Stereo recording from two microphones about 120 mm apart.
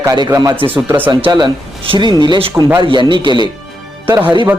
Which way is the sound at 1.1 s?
40° right (ahead or behind).